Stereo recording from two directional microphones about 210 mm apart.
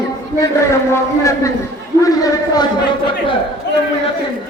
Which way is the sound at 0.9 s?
15° left (ahead or behind).